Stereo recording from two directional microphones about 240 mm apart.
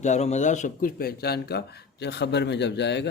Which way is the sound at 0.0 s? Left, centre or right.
Left.